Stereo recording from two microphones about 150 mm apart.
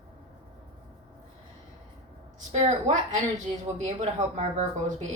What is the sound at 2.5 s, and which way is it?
Speech, 50° right (ahead or behind).